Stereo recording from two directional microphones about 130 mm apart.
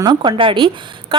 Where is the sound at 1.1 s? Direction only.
40° right (ahead or behind).